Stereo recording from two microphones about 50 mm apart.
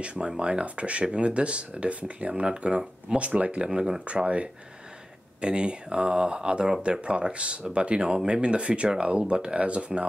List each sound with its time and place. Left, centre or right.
0.0 s speech: right